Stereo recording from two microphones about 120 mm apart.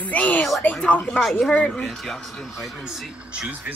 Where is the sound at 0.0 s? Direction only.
10° left (ahead or behind).